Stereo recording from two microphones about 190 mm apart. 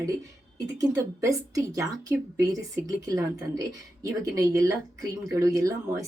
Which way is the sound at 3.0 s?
15° right (ahead or behind).